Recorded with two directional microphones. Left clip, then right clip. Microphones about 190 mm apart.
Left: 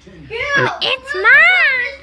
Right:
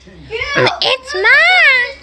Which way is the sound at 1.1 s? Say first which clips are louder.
Left 1 dB; 30° right (ahead or behind).